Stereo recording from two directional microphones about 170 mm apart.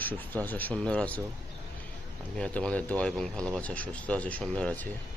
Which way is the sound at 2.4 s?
5° left (ahead or behind).